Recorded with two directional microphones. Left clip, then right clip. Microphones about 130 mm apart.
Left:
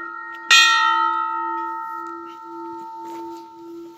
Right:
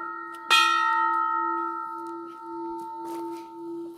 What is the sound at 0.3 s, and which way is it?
Church bell, 85° right.